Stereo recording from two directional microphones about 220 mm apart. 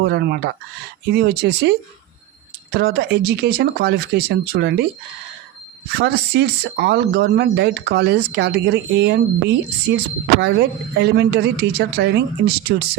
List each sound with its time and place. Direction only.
0.0 s speech: 50° right (ahead or behind)
2.7 s speech: 45° right (ahead or behind)
6.0 s speech: 45° right (ahead or behind)